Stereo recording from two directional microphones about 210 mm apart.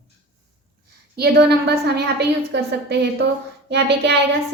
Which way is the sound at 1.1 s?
50° right (ahead or behind).